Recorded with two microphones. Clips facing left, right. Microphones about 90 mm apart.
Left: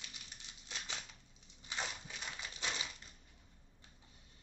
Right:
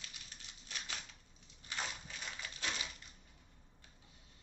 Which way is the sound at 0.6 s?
20° left (ahead or behind).